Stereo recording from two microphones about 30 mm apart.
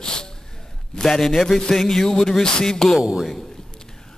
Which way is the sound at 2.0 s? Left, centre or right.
Left.